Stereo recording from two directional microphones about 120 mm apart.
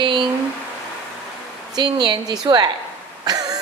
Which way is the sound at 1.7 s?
40° right (ahead or behind).